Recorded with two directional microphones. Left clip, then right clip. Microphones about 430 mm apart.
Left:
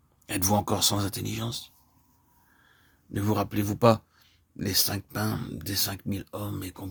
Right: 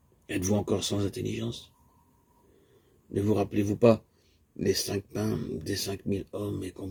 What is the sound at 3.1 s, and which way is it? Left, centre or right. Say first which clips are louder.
Speech: right 1 dB; left.